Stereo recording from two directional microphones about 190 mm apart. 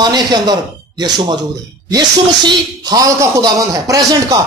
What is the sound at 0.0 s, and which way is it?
Speech, 20° right (ahead or behind).